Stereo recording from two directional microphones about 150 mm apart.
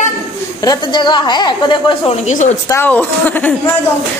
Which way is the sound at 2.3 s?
55° left (ahead or behind).